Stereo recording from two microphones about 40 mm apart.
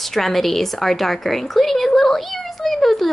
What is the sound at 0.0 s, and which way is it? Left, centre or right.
A woman's voice, centre.